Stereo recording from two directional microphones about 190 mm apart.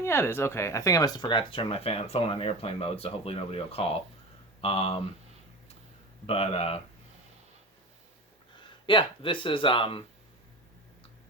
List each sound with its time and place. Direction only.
0.0 s speech: 10° left (ahead or behind); by 4.9 s 30° left (ahead or behind)
6.2 s speech: 30° left (ahead or behind)
8.6 s speech: 25° left (ahead or behind)